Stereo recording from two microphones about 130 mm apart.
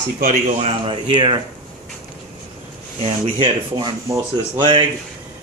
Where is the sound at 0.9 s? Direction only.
40° right (ahead or behind).